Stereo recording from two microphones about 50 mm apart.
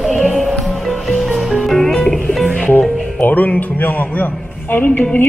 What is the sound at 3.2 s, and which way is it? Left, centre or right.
Speech, left.